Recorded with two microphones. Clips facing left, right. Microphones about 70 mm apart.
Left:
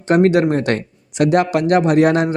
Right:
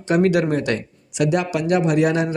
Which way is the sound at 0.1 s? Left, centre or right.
Left.